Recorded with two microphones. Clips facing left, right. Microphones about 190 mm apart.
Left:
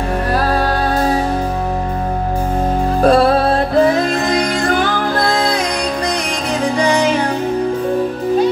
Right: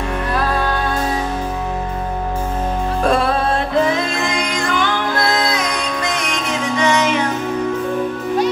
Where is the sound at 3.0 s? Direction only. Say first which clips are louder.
Left 6 dB; 35° left (ahead or behind).